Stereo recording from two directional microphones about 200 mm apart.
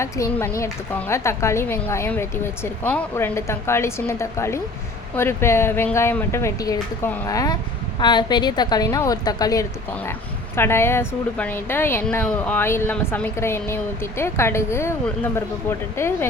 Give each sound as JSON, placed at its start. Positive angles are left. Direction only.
{"t": 0.0, "sound": "a woman's voice", "side_deg": 10}